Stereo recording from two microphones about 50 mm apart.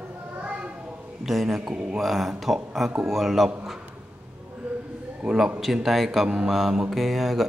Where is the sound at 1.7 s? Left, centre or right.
Centre.